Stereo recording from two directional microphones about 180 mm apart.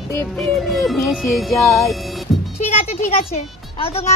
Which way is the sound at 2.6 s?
35° left (ahead or behind).